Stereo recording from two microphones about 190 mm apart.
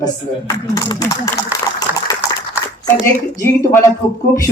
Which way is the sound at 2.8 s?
15° left (ahead or behind).